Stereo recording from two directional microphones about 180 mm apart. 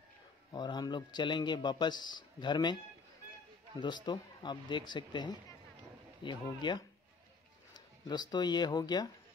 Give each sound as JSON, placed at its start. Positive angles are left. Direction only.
{"t": 0.5, "sound": "a man's voice", "side_deg": 25}
{"t": 3.8, "sound": "a man's voice", "side_deg": 25}